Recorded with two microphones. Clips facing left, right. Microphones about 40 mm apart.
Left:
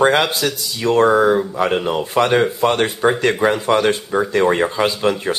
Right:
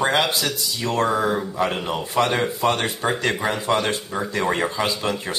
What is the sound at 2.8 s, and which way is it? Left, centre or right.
Speech, centre.